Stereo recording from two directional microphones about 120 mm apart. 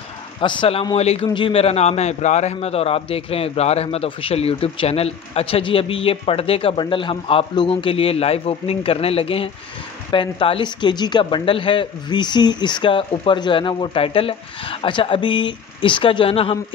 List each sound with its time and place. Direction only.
0.4 s a man's voice: 45° left (ahead or behind)
0.9 s a man's voice: 60° left (ahead or behind)
1.3 s a man's voice: 50° left (ahead or behind)